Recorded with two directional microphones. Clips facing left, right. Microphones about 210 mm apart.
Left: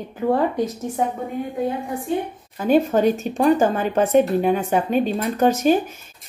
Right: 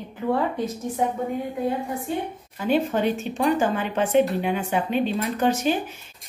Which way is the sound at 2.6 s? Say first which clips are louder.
Left 5 dB; 45° left (ahead or behind).